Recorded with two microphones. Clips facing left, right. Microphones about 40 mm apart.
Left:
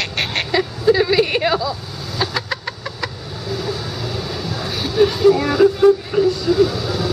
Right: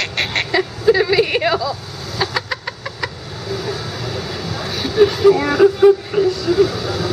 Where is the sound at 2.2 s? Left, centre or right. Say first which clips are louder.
Right 1 dB; centre.